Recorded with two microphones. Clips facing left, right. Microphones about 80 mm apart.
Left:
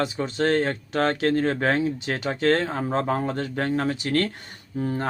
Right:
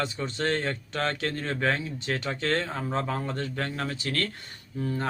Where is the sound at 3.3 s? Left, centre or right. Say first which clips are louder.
Left 6 dB; centre.